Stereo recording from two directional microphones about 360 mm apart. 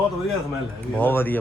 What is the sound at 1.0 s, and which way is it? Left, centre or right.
Speech, centre.